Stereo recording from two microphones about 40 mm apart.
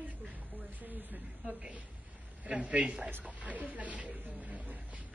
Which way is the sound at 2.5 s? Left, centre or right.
Right.